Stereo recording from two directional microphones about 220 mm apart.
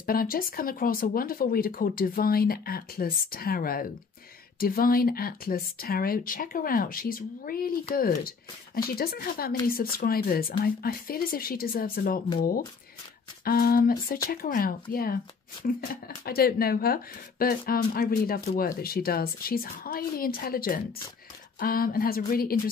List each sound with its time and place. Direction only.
0.0 s speech: 40° left (ahead or behind)